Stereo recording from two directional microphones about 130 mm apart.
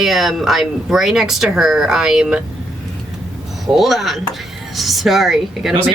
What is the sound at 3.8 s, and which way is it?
Speech, centre (ahead or behind).